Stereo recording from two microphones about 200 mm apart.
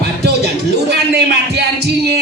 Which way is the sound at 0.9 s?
55° right (ahead or behind).